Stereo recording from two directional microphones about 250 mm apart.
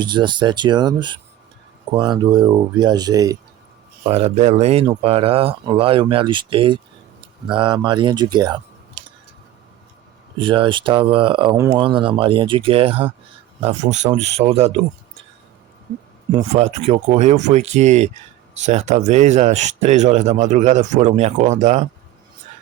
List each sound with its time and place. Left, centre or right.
0.0 s speech: centre
10.3 s speech: centre
16.3 s speech: right